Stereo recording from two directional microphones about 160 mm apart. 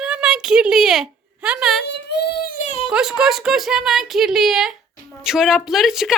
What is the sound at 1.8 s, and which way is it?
Speech, 90° left.